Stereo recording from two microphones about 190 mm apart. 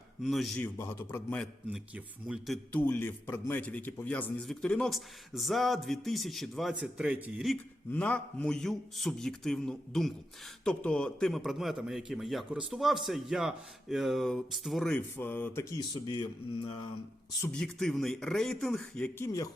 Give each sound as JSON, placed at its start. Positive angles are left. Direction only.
{"t": 0.2, "sound": "a man's voice", "side_deg": 0}
{"t": 0.8, "sound": "a man's voice", "side_deg": 15}
{"t": 2.2, "sound": "a man's voice", "side_deg": -5}
{"t": 2.7, "sound": "a man's voice", "side_deg": 10}
{"t": 15.9, "sound": "speech", "side_deg": 25}
{"t": 17.4, "sound": "a man's voice", "side_deg": 5}